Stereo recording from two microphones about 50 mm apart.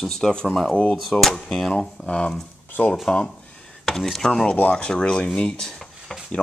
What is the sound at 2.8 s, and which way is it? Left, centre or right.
Dishes, left.